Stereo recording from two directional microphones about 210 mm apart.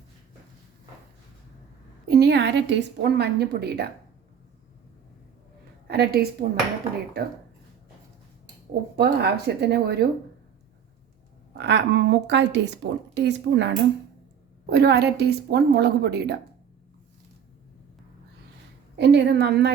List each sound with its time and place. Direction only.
2.0 s a woman's voice: 50° right (ahead or behind)
5.9 s a woman's voice: 50° right (ahead or behind)
9.0 s a woman's voice: 50° right (ahead or behind)
11.5 s a woman's voice: 55° right (ahead or behind)
18.9 s a woman's voice: 55° right (ahead or behind)